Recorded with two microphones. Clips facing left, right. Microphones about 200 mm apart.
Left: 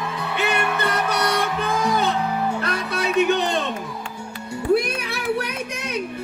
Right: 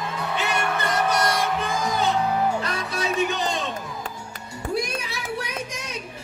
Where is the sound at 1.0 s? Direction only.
60° left (ahead or behind).